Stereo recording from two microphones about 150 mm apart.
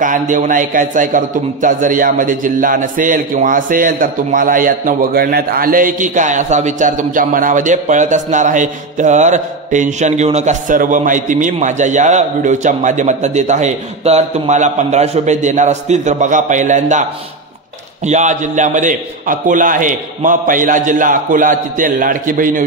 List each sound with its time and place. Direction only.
0.0 s a man's voice: 60° right (ahead or behind)
18.0 s a man's voice: 50° right (ahead or behind)